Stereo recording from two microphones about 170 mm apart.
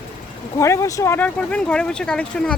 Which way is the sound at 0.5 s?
15° left (ahead or behind).